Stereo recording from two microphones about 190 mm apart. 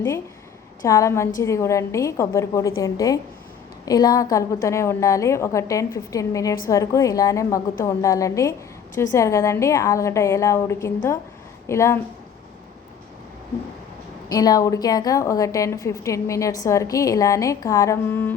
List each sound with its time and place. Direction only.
0.8 s a woman's voice: 15° left (ahead or behind)
14.3 s a woman's voice: 20° left (ahead or behind)